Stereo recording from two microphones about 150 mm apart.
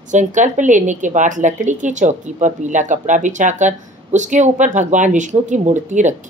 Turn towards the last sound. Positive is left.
turn(degrees=-55)  # may be behind; listen again after turning